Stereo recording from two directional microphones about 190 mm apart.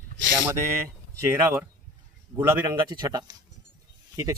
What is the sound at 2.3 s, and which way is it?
A man's voice, 20° right (ahead or behind).